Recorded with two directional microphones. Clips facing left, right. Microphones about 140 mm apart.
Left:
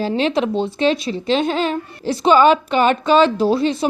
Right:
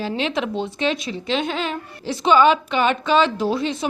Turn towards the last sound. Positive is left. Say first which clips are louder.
# left 5 dB
turn(degrees=35)  # may be behind; listen again after turning